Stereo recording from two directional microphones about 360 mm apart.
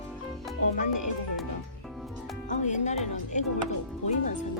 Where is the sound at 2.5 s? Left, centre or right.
Centre.